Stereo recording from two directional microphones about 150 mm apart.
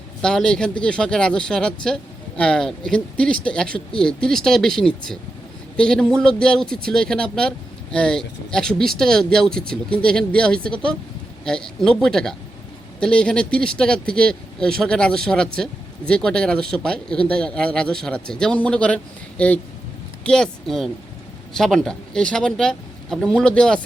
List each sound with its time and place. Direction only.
0.2 s speech: 5° left (ahead or behind)